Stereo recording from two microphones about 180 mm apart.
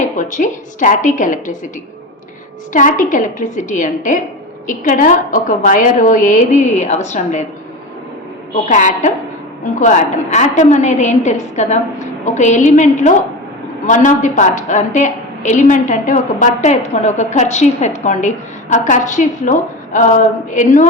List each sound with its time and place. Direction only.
0.0 s a woman's voice: 45° left (ahead or behind)
2.7 s a woman's voice: 45° left (ahead or behind)
8.6 s a woman's voice: 45° left (ahead or behind)